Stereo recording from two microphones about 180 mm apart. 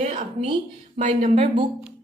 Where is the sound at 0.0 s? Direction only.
35° right (ahead or behind).